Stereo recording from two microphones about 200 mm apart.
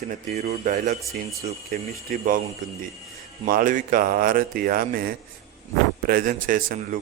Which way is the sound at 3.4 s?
45° right (ahead or behind).